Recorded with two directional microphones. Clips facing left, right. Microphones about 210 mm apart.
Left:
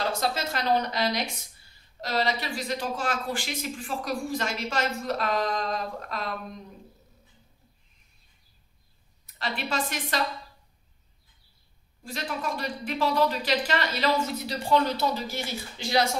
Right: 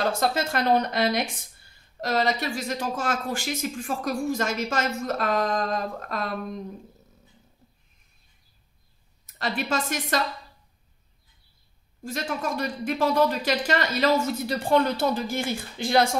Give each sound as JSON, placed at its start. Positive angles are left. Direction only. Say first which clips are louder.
{"t": 0.2, "sound": "speech", "louder": "right 4 dB", "side_deg": -50}
{"t": 9.4, "sound": "speech", "louder": "right 3 dB", "side_deg": -45}
{"t": 12.0, "sound": "speech", "louder": "right 3 dB", "side_deg": -45}